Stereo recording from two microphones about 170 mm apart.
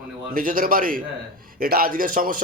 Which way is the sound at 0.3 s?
55° right (ahead or behind).